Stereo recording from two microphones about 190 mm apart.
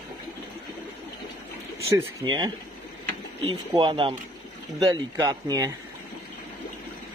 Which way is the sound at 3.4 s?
25° right (ahead or behind).